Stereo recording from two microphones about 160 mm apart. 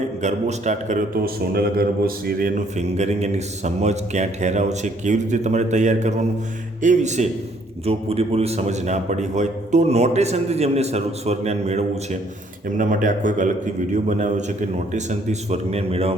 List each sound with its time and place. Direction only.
0.2 s a man's voice: 45° right (ahead or behind)
1.1 s a man's voice: 70° right (ahead or behind); by 16.1 s 40° right (ahead or behind)